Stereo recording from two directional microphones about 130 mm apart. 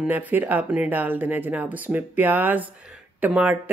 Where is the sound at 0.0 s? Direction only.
15° right (ahead or behind).